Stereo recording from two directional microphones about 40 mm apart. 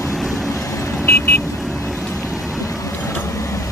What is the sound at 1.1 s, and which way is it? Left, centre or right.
Vehicle, left.